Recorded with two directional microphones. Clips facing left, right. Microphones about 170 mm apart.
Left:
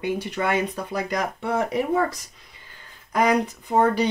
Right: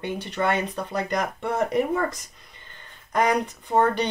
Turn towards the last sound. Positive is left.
turn(degrees=5)  # may be behind; listen again after turning